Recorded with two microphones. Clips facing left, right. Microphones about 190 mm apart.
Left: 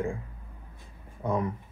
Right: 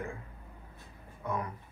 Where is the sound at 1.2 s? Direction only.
25° left (ahead or behind).